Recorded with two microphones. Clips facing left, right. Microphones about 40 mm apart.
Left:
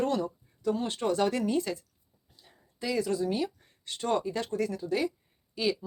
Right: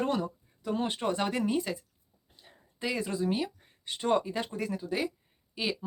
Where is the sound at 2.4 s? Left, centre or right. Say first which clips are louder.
Even; right.